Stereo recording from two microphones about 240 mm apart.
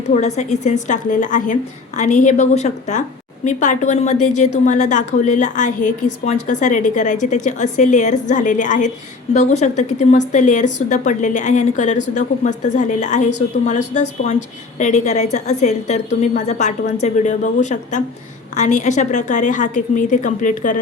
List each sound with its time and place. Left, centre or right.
0.1 s a woman's voice: left